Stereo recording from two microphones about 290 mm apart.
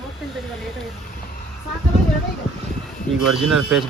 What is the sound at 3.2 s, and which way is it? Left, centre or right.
Speech, centre.